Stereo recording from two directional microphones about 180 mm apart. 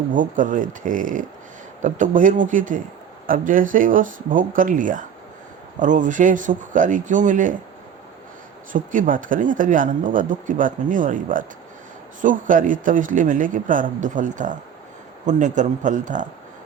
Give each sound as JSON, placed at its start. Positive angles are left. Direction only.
{"t": 0.1, "sound": "speech", "side_deg": -45}
{"t": 8.7, "sound": "speech", "side_deg": -45}